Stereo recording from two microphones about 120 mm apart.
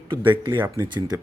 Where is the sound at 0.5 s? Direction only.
15° right (ahead or behind).